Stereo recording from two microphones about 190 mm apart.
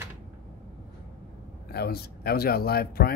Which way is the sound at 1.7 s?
55° left (ahead or behind).